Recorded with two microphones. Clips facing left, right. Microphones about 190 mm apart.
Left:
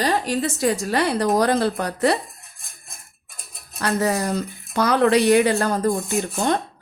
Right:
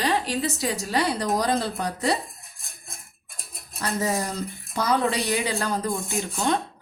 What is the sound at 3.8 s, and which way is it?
Speech, 70° left (ahead or behind).